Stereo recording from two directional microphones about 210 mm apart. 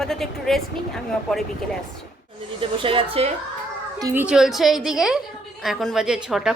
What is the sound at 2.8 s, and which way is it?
Speech, 25° right (ahead or behind).